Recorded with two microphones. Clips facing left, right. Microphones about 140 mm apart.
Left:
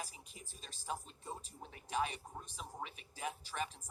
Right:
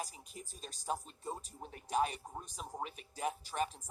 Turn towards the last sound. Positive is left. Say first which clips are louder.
# right 5 dB
turn(degrees=-45)  # may be behind; listen again after turning